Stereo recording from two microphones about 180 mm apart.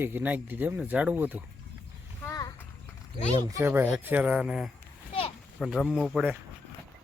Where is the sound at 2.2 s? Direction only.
15° left (ahead or behind).